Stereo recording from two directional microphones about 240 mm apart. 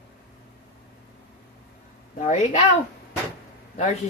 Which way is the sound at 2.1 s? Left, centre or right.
Left.